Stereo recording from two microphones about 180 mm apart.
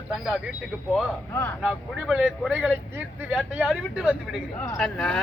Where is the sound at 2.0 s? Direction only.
5° right (ahead or behind).